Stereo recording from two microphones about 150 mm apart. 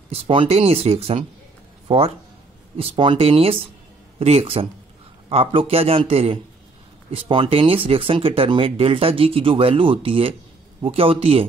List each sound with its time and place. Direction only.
0.1 s speech: 40° right (ahead or behind)